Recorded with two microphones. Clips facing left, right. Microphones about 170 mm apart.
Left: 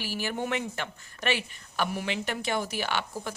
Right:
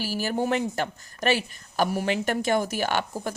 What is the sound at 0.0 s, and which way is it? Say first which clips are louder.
Speech: right 5 dB; 40° right (ahead or behind).